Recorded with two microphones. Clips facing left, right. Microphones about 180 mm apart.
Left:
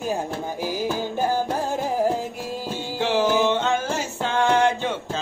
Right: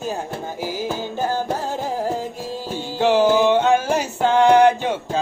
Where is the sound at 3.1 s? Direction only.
15° right (ahead or behind).